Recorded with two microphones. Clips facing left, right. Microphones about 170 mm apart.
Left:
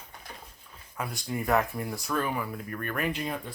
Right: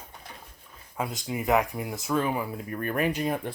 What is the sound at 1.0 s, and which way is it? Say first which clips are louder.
Speech: right 2 dB; 25° right (ahead or behind).